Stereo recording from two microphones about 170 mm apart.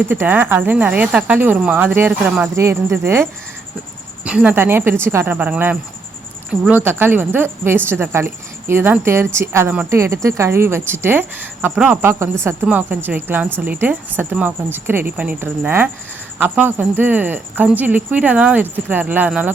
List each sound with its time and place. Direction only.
0.0 s a woman's voice: 10° right (ahead or behind)